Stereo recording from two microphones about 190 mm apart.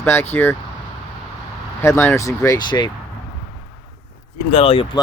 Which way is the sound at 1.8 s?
15° left (ahead or behind).